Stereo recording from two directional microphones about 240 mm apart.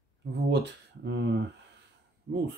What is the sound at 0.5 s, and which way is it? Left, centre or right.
Speech, right.